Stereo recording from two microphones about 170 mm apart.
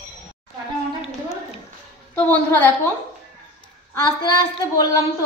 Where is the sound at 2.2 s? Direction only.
10° left (ahead or behind).